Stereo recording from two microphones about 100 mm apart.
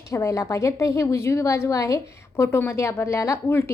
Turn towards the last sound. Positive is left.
turn(degrees=25)  # may be behind; listen again after turning